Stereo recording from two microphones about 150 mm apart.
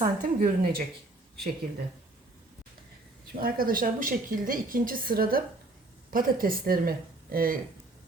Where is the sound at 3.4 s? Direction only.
75° right (ahead or behind).